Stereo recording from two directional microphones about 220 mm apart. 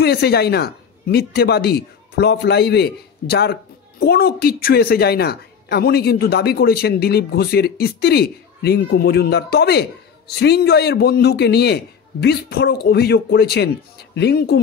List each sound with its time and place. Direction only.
0.0 s a woman's voice: 45° left (ahead or behind)